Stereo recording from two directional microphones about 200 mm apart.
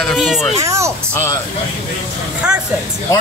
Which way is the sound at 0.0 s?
Centre (ahead or behind).